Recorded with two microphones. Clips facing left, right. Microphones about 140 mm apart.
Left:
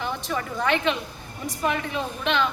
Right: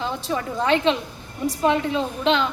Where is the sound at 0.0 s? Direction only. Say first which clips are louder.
Right 3 dB; 25° right (ahead or behind).